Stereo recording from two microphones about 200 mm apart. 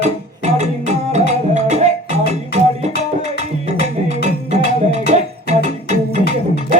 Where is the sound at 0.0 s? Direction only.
35° right (ahead or behind).